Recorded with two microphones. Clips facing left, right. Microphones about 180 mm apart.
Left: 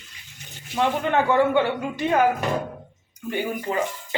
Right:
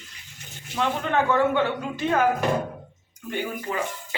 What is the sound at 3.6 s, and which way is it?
Speech, 35° left (ahead or behind).